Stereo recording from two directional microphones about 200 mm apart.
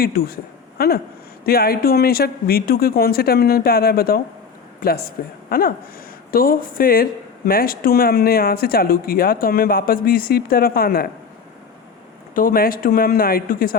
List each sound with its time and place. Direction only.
0.0 s speech: 50° left (ahead or behind)
12.3 s speech: 45° left (ahead or behind)